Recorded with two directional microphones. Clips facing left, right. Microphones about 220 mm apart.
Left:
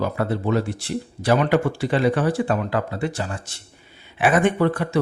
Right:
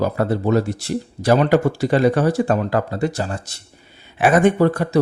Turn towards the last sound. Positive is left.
turn(degrees=-40)  # may be behind; listen again after turning